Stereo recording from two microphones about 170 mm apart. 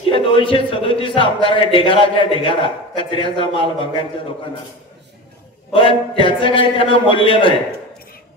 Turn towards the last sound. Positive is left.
turn(degrees=30)  # may be behind; listen again after turning